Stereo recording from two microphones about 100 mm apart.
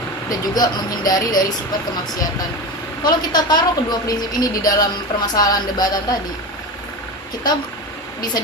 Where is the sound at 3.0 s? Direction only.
45° left (ahead or behind).